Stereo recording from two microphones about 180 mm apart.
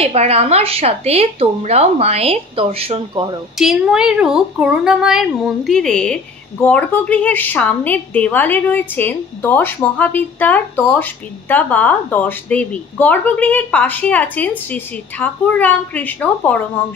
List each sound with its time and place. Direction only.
0.0 s a woman's voice: 35° right (ahead or behind)
3.5 s speech: 5° right (ahead or behind)